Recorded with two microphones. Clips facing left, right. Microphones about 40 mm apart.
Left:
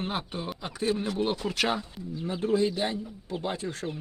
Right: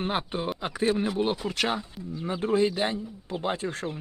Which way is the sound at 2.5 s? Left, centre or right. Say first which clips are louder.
Right 2 dB; right.